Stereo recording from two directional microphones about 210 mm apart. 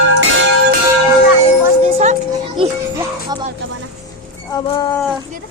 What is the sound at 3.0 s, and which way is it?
Music, 20° right (ahead or behind).